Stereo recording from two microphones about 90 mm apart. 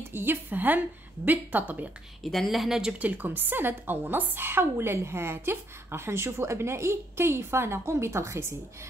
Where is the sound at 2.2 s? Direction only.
Centre (ahead or behind).